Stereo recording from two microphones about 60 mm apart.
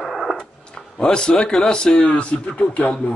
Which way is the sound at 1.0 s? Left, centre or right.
Centre.